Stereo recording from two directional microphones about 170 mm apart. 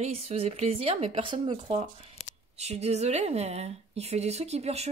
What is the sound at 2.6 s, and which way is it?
A woman's voice, 40° right (ahead or behind).